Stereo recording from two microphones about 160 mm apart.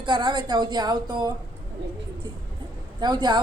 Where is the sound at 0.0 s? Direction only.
30° right (ahead or behind).